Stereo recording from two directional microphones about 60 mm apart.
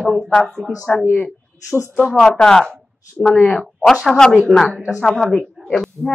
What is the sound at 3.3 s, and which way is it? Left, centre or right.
Speech, left.